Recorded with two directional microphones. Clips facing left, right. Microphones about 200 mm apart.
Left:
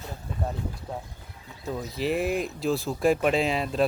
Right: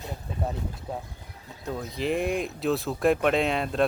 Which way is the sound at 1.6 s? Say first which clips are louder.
Left 1 dB; centre (ahead or behind).